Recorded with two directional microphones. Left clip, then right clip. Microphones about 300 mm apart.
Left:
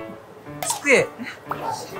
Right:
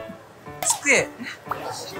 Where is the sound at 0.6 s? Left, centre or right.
Centre.